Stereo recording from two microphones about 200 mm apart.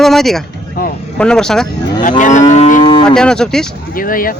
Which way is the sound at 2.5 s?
30° left (ahead or behind).